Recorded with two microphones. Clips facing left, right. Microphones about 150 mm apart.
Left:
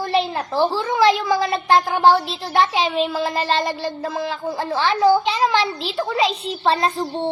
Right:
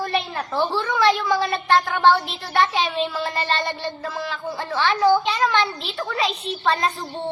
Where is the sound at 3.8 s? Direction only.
35° left (ahead or behind).